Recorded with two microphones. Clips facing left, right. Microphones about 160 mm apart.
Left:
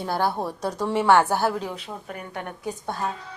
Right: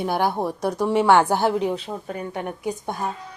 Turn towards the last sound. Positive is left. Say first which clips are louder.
# right 2 dB
turn(degrees=-15)  # may be behind; listen again after turning